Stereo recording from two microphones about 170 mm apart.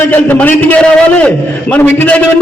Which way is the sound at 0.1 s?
10° left (ahead or behind).